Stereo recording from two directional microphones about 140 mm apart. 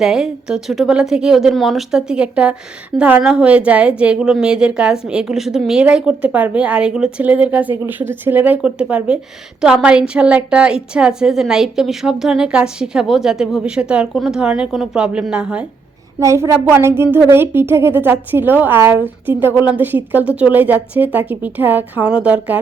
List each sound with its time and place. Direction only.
0.0 s a woman's voice: 5° right (ahead or behind)
16.2 s a woman's voice: 20° right (ahead or behind)